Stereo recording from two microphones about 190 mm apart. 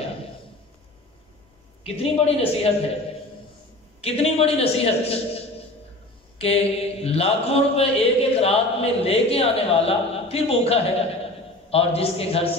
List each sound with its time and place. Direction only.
2.0 s mantra: 30° left (ahead or behind)
4.0 s a man's voice: 30° left (ahead or behind)
6.3 s mantra: 30° left (ahead or behind)